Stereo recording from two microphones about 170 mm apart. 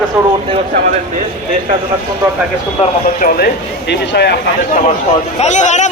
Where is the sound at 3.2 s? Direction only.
60° left (ahead or behind); by 4.4 s 80° left.